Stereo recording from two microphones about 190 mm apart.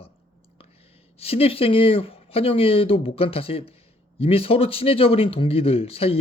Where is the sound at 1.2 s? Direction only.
30° left (ahead or behind).